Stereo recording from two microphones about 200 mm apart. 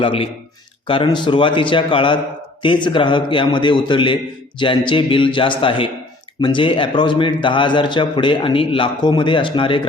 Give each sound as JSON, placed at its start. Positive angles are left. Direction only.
{"t": 0.0, "sound": "a man's voice", "side_deg": 25}